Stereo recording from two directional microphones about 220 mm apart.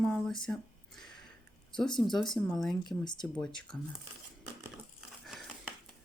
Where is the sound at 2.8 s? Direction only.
20° left (ahead or behind).